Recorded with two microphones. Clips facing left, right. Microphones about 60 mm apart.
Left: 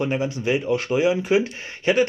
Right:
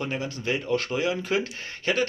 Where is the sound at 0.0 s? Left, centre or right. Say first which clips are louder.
Left 7 dB; centre.